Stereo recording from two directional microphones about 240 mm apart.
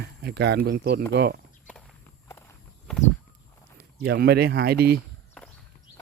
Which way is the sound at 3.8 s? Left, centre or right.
Right.